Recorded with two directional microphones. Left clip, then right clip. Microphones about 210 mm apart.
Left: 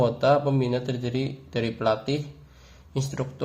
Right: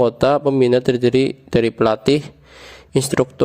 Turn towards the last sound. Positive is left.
turn(degrees=-55)  # may be behind; listen again after turning